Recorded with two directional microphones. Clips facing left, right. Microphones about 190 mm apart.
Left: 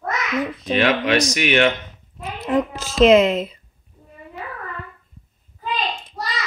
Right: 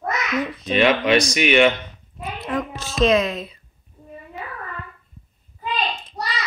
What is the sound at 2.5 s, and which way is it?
Speech, 30° left (ahead or behind).